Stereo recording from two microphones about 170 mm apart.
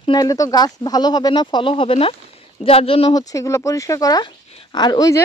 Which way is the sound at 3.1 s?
20° left (ahead or behind).